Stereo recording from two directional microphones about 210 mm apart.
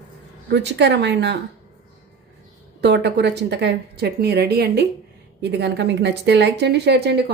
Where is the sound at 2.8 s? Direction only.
55° right (ahead or behind).